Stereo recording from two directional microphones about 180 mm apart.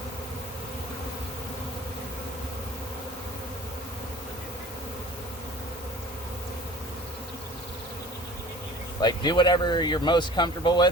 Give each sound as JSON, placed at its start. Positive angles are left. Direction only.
{"t": 9.0, "sound": "speech", "side_deg": 25}